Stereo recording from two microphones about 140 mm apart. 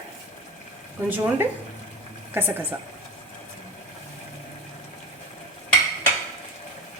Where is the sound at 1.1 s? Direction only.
15° right (ahead or behind).